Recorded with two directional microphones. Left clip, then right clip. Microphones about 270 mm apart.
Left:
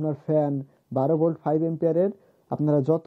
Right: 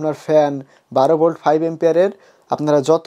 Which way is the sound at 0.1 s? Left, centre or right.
Centre.